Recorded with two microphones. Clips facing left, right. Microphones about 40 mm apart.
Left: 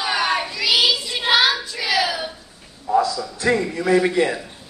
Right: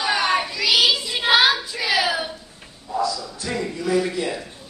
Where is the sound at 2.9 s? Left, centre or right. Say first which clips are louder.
Left 5 dB; left.